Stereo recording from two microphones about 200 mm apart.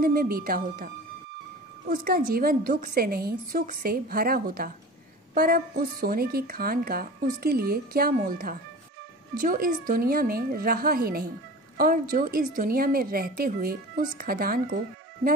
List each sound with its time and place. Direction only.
0.0 s a woman's voice: 45° right (ahead or behind)
1.9 s a woman's voice: 50° right (ahead or behind)